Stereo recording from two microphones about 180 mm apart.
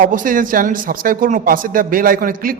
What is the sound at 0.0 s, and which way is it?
Speech, 50° right (ahead or behind).